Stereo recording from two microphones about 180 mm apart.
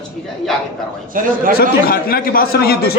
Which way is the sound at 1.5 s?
55° left (ahead or behind).